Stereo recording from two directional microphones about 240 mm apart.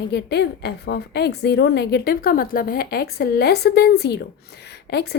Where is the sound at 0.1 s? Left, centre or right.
Left.